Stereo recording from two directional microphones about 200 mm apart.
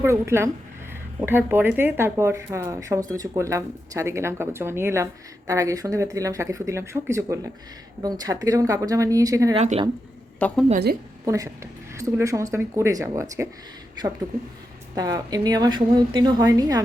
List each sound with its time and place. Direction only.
0.0 s speech: 15° right (ahead or behind)
9.6 s speech: 30° right (ahead or behind)
10.4 s a woman's voice: 5° left (ahead or behind)
11.3 s speech: 15° right (ahead or behind)
14.9 s a woman's voice: 20° right (ahead or behind)